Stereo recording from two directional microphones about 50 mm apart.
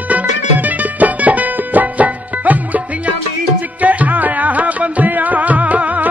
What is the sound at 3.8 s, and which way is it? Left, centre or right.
Music, right.